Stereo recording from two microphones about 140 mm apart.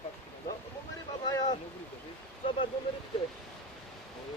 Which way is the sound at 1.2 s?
30° left (ahead or behind).